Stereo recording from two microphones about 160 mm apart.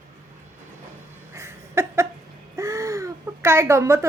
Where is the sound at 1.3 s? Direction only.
15° right (ahead or behind).